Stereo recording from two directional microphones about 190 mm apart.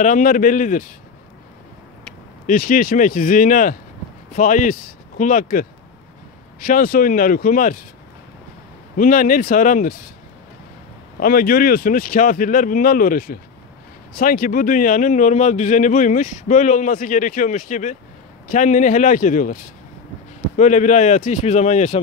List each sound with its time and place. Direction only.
0.0 s a man's voice: 45° left (ahead or behind)
2.4 s a man's voice: 45° left (ahead or behind)
8.9 s a man's voice: 45° left (ahead or behind)
11.1 s a man's voice: 50° left (ahead or behind)